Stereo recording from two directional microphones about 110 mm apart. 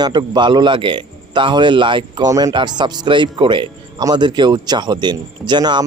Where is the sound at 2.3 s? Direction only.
30° right (ahead or behind).